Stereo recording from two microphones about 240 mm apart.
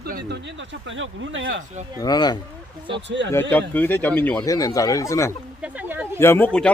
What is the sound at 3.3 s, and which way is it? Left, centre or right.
Speech, centre.